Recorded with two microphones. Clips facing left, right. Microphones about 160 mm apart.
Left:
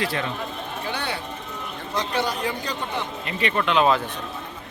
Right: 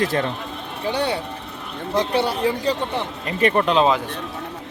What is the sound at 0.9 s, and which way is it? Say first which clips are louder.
A man's voice: right 9 dB; 30° right (ahead or behind).